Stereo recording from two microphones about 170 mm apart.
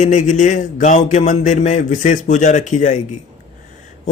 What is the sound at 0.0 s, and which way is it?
A man's voice, 45° left (ahead or behind).